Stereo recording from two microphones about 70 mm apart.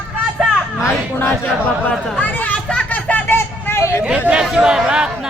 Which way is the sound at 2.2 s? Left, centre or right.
Left.